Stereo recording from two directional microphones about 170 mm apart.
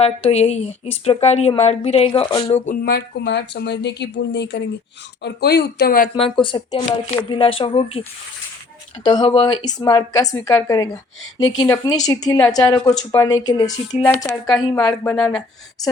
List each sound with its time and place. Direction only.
0.0 s speech: 35° left (ahead or behind)
2.8 s speech: 75° left (ahead or behind); by 4.6 s 90° left
5.2 s a woman's voice: 75° left (ahead or behind)
6.4 s speech: 30° left (ahead or behind)
9.0 s a woman's voice: 25° left (ahead or behind)
14.8 s a woman's voice: 5° left (ahead or behind)